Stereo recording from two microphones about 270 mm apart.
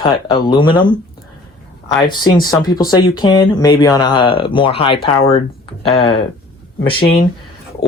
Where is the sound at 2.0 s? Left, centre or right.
Centre.